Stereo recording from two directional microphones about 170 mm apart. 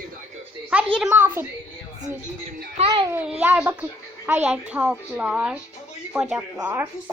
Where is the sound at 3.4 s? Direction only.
10° right (ahead or behind).